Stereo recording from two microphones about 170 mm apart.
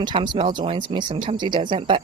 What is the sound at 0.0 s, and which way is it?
Speech, 30° right (ahead or behind).